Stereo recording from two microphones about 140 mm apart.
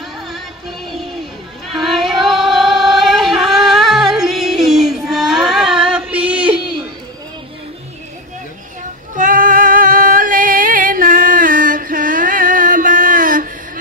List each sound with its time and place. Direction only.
1.8 s singing: centre (ahead or behind)
9.1 s music: 70° right (ahead or behind)